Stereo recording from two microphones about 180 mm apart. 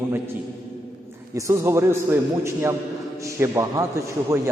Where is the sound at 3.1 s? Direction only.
15° right (ahead or behind).